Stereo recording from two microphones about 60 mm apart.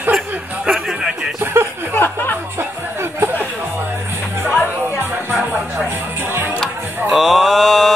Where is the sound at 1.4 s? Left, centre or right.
Right.